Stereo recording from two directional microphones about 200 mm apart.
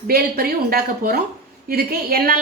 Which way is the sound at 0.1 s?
50° right (ahead or behind).